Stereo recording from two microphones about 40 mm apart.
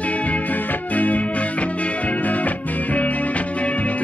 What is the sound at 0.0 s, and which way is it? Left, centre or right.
Music, left.